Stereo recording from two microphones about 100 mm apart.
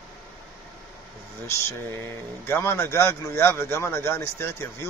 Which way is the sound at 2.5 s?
25° left (ahead or behind).